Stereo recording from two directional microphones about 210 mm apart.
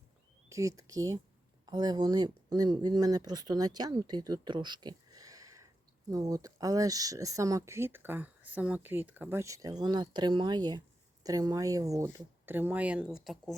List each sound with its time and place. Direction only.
0.4 s speech: 15° right (ahead or behind)